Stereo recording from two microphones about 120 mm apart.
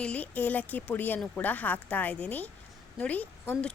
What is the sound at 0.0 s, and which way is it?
Speech, 10° left (ahead or behind).